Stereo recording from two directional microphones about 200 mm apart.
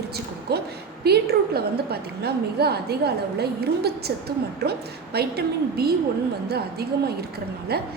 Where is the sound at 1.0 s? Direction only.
50° right (ahead or behind).